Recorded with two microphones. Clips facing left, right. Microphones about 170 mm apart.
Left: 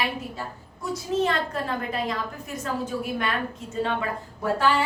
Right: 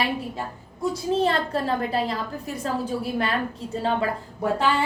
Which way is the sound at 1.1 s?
30° right (ahead or behind).